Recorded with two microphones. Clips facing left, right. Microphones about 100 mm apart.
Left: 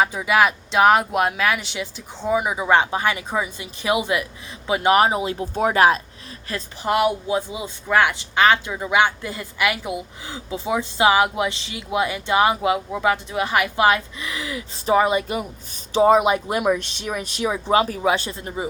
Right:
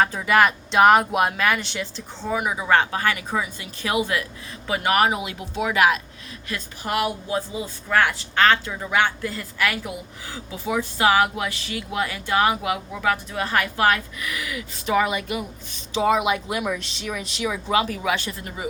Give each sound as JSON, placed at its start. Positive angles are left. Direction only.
{"t": 0.0, "sound": "speech", "side_deg": 10}
{"t": 2.2, "sound": "speech", "side_deg": 20}